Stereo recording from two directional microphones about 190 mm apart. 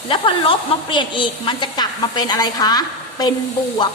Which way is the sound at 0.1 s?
25° left (ahead or behind).